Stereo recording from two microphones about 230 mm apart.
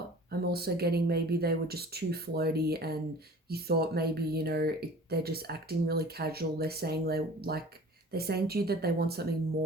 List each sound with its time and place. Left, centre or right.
0.3 s speech: right